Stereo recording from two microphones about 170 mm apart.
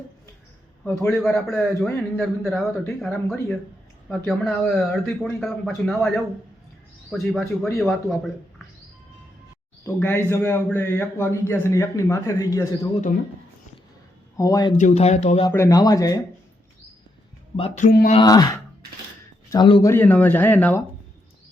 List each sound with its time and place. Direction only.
0.9 s a man's voice: centre (ahead or behind)
9.8 s a man's voice: 15° left (ahead or behind)
14.3 s speech: 20° left (ahead or behind)
14.8 s speech: 40° left (ahead or behind)
15.4 s speech: 20° left (ahead or behind)
17.6 s speech: 45° left (ahead or behind)
18.2 s speech: 25° left (ahead or behind)
19.9 s a man's voice: 10° left (ahead or behind)